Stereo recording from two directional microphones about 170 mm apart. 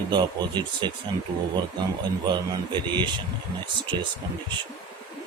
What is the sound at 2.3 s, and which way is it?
Speech, 25° right (ahead or behind).